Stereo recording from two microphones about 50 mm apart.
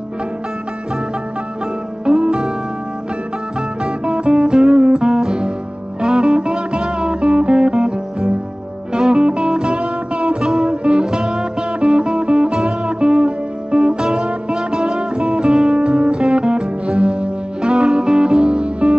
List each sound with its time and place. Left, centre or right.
2.0 s music: centre
3.8 s music: centre
8.9 s music: centre